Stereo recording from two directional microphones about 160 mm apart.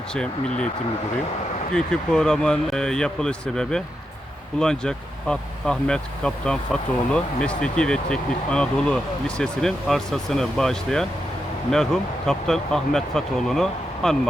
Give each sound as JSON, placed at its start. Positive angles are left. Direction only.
{"t": 0.1, "sound": "speech", "side_deg": 5}
{"t": 1.7, "sound": "speech", "side_deg": 5}